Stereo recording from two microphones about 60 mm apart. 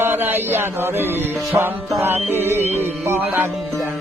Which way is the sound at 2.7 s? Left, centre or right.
Right.